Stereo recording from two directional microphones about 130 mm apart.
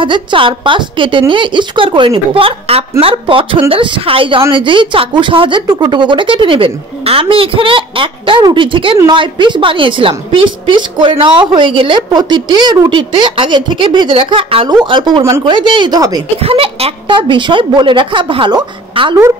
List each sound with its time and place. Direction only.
0.0 s a woman's voice: 40° right (ahead or behind)
16.3 s a woman's voice: 45° right (ahead or behind)